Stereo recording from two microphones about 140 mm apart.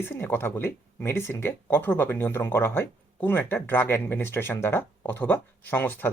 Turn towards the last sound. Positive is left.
turn(degrees=15)  # may be behind; listen again after turning